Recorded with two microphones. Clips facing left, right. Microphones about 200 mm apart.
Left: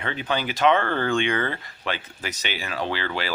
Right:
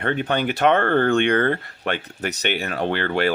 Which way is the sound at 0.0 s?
55° right (ahead or behind).